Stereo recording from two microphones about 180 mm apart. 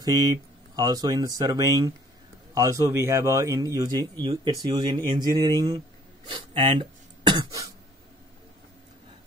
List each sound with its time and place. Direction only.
0.0 s speech: 20° right (ahead or behind)
6.8 s throat clearing: 25° right (ahead or behind)